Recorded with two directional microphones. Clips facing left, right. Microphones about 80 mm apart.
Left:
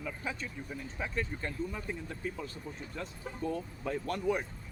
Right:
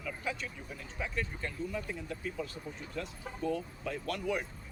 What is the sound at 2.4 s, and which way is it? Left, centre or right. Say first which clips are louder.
Speech: right 1 dB; left.